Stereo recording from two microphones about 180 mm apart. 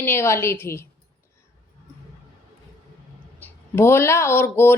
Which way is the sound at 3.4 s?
15° left (ahead or behind).